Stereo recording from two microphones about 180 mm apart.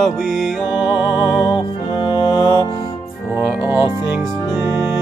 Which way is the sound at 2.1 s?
25° left (ahead or behind).